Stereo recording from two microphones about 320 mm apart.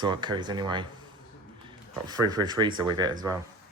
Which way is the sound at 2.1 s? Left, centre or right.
Centre.